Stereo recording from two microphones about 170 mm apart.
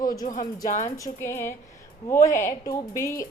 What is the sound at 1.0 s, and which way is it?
A woman's voice, 15° left (ahead or behind).